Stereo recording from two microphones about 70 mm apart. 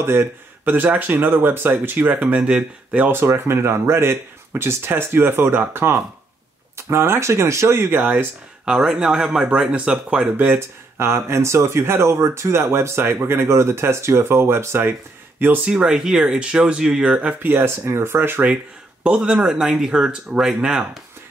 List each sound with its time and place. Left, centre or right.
0.0 s speech: right; by 3.1 s centre
3.1 s speech: right
8.6 s speech: centre
10.3 s speech: right
15.6 s speech: centre
17.4 s speech: right
19.0 s speech: centre